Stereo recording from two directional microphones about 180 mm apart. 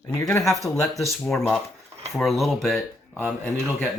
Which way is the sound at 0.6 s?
Centre (ahead or behind).